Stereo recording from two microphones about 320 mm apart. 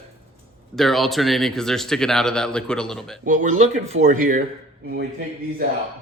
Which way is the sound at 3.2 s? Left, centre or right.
Right.